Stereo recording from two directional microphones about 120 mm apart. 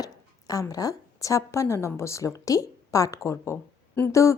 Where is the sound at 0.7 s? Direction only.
30° left (ahead or behind).